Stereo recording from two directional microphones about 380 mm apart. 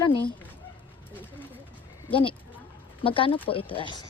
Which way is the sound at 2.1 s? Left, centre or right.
Centre.